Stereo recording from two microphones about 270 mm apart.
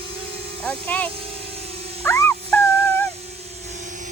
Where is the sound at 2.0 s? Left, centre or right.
Centre.